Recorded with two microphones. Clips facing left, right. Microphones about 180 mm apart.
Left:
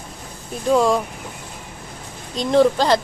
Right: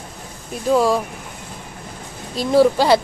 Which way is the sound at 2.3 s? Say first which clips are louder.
Right 1 dB; 5° right (ahead or behind).